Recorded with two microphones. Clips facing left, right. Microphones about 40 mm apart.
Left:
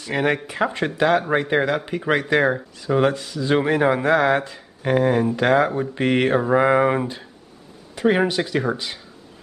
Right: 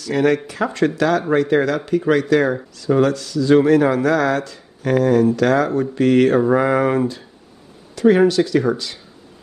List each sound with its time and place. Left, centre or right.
0.0 s speech: left